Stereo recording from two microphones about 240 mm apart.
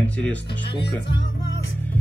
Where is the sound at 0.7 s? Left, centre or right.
Left.